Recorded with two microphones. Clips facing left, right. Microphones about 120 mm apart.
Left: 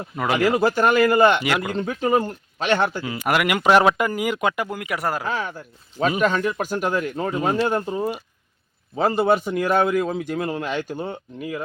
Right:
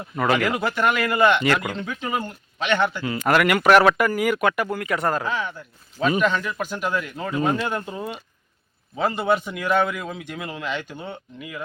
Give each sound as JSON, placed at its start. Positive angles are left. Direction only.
{"t": 0.2, "sound": "speech", "side_deg": 10}
{"t": 0.4, "sound": "a man's voice", "side_deg": 35}
{"t": 1.4, "sound": "speech", "side_deg": 10}
{"t": 1.7, "sound": "a man's voice", "side_deg": 40}
{"t": 3.0, "sound": "speech", "side_deg": 15}
{"t": 5.3, "sound": "a man's voice", "side_deg": 40}
{"t": 7.4, "sound": "a man's voice", "side_deg": 30}